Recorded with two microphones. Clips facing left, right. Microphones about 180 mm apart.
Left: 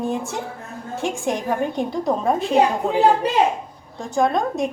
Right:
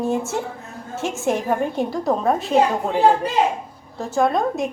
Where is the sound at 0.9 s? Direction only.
5° right (ahead or behind).